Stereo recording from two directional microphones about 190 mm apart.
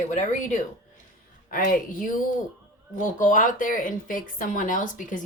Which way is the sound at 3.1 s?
45° left (ahead or behind).